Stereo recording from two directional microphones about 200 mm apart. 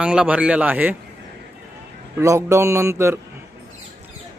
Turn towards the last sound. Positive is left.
turn(degrees=-15)  # may be behind; listen again after turning